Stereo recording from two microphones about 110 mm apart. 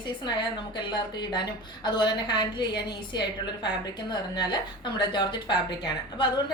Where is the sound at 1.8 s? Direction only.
40° left (ahead or behind).